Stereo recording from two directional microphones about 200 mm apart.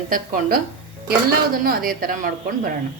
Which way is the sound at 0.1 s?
45° right (ahead or behind).